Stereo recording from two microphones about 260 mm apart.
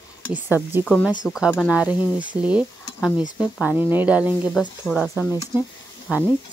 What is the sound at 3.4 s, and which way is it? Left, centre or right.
Speech, centre.